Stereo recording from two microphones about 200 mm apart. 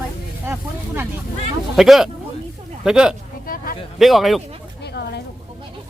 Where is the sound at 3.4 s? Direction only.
45° left (ahead or behind).